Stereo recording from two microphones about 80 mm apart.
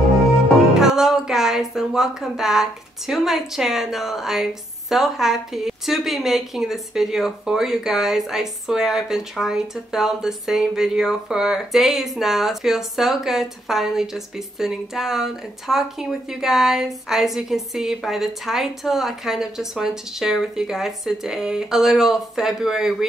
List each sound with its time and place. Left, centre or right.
0.6 s speech: centre